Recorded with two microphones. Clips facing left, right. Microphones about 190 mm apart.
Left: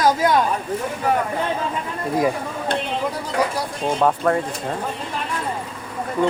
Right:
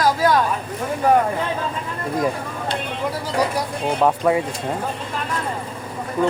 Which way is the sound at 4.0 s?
10° right (ahead or behind).